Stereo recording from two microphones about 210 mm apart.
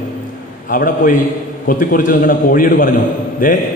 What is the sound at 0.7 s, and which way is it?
A man's voice, 40° left (ahead or behind).